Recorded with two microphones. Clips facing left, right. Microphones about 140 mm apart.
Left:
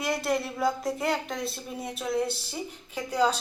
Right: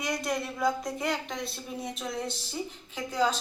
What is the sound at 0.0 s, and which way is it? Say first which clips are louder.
A woman's voice: left 3 dB; 5° left (ahead or behind).